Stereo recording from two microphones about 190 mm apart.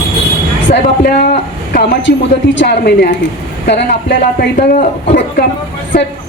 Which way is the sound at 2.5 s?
65° left (ahead or behind).